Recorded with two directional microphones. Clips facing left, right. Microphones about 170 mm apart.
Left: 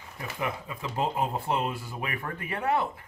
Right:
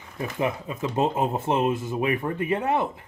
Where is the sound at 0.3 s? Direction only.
20° right (ahead or behind).